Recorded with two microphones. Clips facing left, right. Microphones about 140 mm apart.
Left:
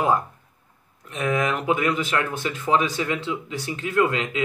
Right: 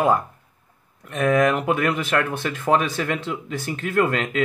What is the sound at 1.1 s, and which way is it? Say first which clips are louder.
Speech: right 5 dB; 55° right (ahead or behind).